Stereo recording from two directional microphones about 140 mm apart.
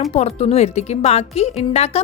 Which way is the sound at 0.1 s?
45° left (ahead or behind).